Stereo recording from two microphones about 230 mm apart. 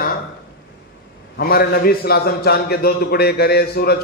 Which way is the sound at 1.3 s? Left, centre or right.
Left.